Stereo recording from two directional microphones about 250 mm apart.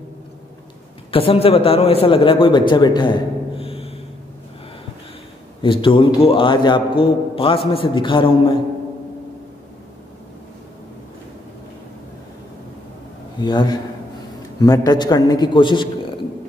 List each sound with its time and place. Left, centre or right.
1.1 s a man's voice: left
5.6 s a man's voice: left
13.4 s a man's voice: centre